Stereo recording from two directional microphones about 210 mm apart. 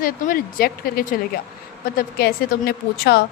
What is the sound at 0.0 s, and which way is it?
A woman's voice, 45° left (ahead or behind).